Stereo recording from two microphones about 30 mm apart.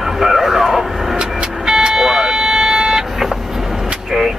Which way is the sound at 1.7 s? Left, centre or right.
Centre.